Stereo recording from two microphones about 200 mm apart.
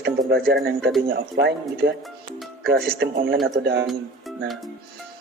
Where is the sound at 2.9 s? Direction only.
50° right (ahead or behind).